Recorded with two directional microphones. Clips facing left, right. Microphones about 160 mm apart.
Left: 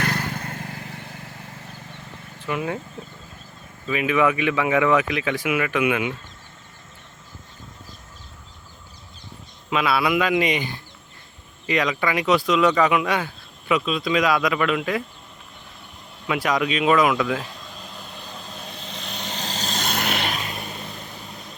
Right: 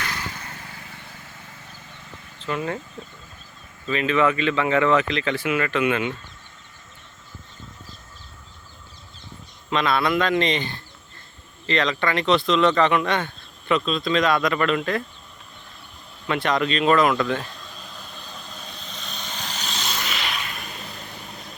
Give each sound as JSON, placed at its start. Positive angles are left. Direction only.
{"t": 0.0, "sound": "vehicle", "side_deg": 55}
{"t": 2.4, "sound": "speech", "side_deg": 10}
{"t": 3.8, "sound": "speech", "side_deg": 10}
{"t": 9.6, "sound": "speech", "side_deg": 5}
{"t": 16.2, "sound": "speech", "side_deg": 5}
{"t": 18.5, "sound": "vehicle", "side_deg": 25}
{"t": 20.3, "sound": "vehicle", "side_deg": 30}